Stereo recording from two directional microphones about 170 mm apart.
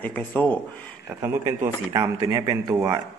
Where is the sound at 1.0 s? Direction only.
15° right (ahead or behind).